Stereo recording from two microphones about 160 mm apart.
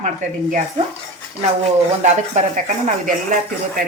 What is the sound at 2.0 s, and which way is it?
Speech, 50° right (ahead or behind).